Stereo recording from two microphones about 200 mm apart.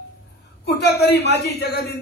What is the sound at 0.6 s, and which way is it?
A man's voice, 55° left (ahead or behind).